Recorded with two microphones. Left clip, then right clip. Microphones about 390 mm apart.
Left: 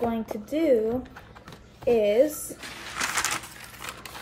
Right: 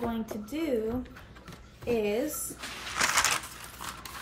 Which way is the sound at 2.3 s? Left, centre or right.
Centre.